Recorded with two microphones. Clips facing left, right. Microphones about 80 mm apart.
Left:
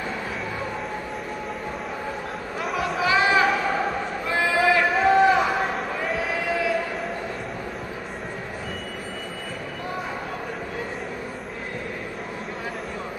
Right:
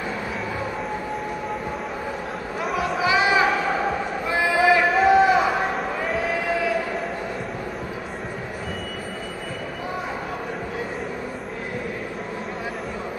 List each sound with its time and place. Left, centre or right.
2.6 s chatter: centre
3.1 s a sound: centre
6.0 s crowd: centre